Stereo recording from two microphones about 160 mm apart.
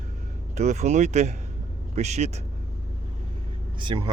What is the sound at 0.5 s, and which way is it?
Speech, 45° right (ahead or behind).